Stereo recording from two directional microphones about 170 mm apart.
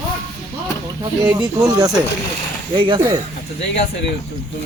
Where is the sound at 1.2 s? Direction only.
25° right (ahead or behind).